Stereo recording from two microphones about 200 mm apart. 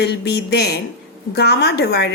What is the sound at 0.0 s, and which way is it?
A woman's voice, 55° left (ahead or behind).